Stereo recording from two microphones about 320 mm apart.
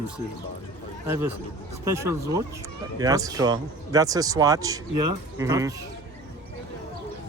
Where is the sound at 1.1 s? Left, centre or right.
Centre.